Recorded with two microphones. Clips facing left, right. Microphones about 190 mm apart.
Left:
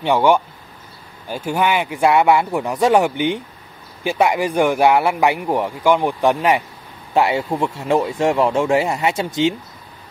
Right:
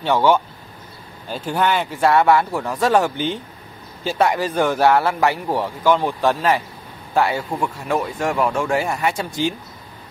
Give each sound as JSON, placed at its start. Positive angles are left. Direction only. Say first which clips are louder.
{"t": 0.0, "sound": "speech", "louder": "left 1 dB", "side_deg": 15}